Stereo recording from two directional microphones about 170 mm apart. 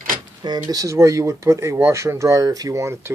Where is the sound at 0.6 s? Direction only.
20° right (ahead or behind).